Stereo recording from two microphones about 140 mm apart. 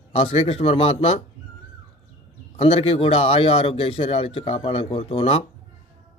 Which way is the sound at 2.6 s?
40° left (ahead or behind).